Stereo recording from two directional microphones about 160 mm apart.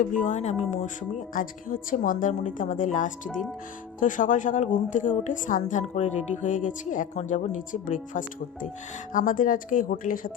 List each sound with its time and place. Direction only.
0.0 s a woman's voice: 50° left (ahead or behind)
1.3 s a woman's voice: 60° left (ahead or behind)